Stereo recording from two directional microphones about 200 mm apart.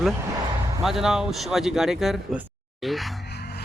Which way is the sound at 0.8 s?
Centre (ahead or behind).